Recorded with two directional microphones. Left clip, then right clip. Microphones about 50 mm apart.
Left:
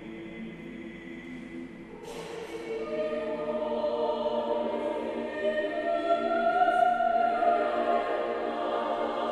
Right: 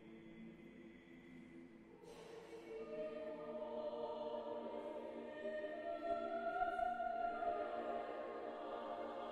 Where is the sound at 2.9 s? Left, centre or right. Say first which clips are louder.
Left 16 dB; centre.